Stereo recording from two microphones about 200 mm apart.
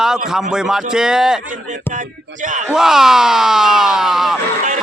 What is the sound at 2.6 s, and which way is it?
Speech, centre (ahead or behind).